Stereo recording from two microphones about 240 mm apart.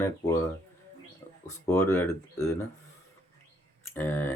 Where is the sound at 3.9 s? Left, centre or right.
Centre.